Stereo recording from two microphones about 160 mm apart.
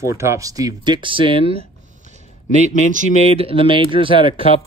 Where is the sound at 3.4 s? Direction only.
35° right (ahead or behind).